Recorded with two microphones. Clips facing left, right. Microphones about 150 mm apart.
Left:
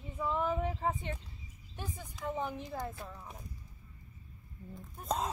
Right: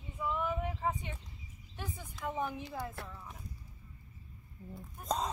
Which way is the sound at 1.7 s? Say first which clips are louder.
Even; 15° left (ahead or behind).